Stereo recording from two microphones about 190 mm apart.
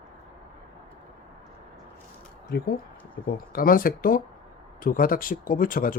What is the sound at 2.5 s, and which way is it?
Speech, 55° left (ahead or behind).